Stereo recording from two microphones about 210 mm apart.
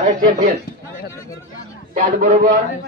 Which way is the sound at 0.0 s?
35° right (ahead or behind).